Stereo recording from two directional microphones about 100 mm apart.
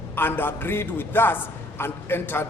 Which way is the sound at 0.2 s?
20° left (ahead or behind).